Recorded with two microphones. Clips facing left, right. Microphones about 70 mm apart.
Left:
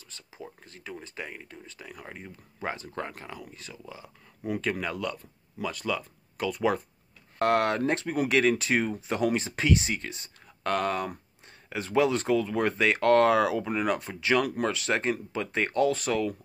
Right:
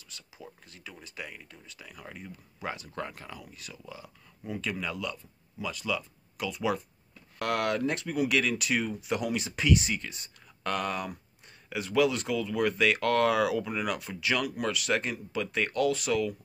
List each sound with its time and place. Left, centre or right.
0.1 s speech: left
4.6 s speech: left
7.3 s speech: left